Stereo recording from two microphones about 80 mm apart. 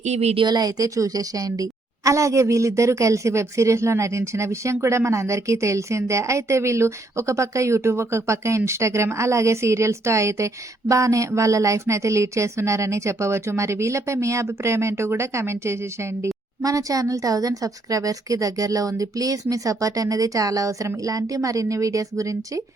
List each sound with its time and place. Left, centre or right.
0.3 s a woman's voice: right
16.6 s a woman's voice: right